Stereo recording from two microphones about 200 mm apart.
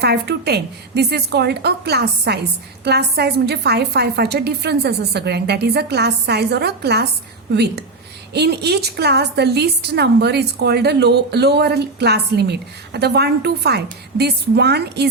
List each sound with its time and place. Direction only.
0.0 s a woman's voice: 55° right (ahead or behind)